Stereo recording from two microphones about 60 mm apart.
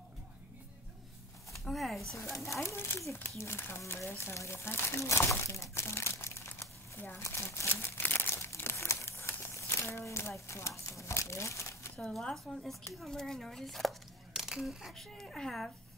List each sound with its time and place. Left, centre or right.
1.6 s speech: centre
2.4 s speech: left
3.1 s speech: left
7.2 s crumpling: left
10.9 s speech: left
12.0 s a woman's voice: centre
14.3 s a sound: centre
15.0 s a woman's voice: centre